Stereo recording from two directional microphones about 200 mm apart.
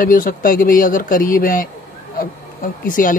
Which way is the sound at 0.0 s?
45° left (ahead or behind).